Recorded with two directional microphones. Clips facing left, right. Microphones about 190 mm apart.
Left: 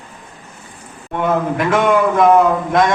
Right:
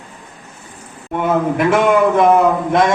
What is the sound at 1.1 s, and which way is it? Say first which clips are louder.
A man's voice: right 1 dB; 5° right (ahead or behind).